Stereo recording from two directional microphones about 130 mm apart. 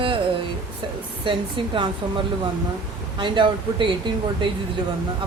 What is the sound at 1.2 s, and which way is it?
Speech, 40° right (ahead or behind).